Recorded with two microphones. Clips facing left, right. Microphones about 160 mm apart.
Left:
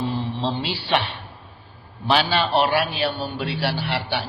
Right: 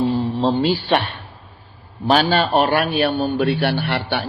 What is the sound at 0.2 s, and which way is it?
A man's voice, 45° right (ahead or behind).